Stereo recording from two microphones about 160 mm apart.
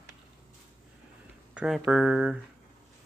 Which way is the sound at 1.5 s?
5° right (ahead or behind).